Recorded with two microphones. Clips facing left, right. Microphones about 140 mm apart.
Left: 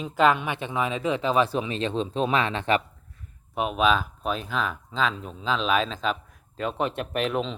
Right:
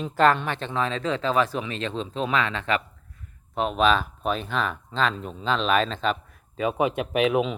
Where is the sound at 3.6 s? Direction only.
5° left (ahead or behind).